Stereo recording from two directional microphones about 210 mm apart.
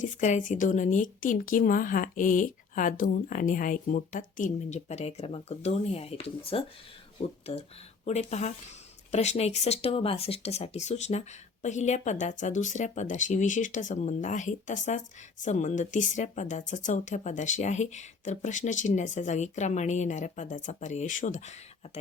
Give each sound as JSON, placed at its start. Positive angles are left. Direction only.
{"t": 0.0, "sound": "speech", "side_deg": 35}
{"t": 8.0, "sound": "speech", "side_deg": 30}